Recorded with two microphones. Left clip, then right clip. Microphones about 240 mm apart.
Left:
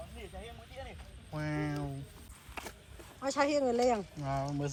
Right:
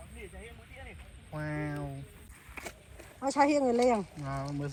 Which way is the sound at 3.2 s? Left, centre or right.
Right.